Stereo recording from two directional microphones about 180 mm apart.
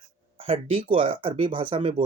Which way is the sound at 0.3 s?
30° right (ahead or behind).